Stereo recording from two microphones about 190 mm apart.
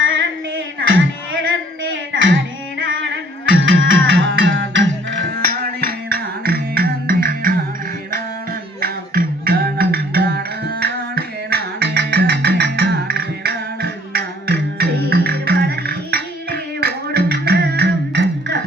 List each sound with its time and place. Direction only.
0.0 s a sound: 85° right
1.8 s music: 85° right; by 7.5 s 50° right (ahead or behind)
8.8 s music: 50° right (ahead or behind)